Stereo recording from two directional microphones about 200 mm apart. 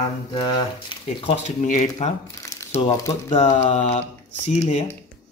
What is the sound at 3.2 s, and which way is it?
Mantra, 35° left (ahead or behind).